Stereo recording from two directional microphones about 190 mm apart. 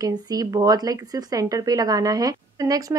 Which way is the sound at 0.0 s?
20° right (ahead or behind).